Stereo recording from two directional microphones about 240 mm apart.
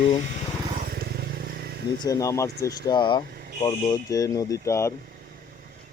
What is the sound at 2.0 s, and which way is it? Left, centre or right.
Speech, centre.